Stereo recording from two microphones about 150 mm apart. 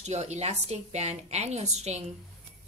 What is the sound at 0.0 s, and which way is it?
A woman's voice, 50° right (ahead or behind).